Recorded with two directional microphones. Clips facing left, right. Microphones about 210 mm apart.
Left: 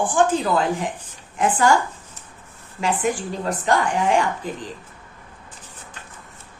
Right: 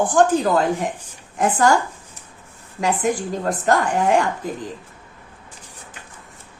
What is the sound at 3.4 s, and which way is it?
Speech, 45° right (ahead or behind).